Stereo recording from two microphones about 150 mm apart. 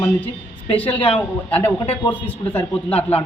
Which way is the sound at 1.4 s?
10° left (ahead or behind).